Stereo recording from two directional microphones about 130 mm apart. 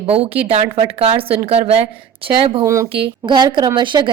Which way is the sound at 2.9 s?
35° right (ahead or behind).